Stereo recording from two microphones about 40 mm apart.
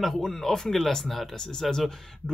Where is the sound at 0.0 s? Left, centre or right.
Centre.